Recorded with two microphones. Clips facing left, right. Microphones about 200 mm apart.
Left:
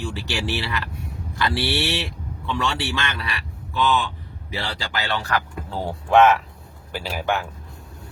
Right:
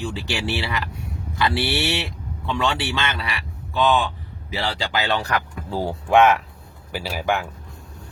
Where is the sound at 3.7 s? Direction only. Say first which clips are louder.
Right 2 dB; 50° right (ahead or behind).